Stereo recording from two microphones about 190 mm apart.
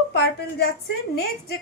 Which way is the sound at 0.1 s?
60° left (ahead or behind).